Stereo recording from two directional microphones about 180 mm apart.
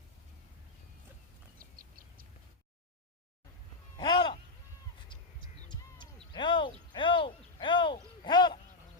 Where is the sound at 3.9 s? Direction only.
25° left (ahead or behind).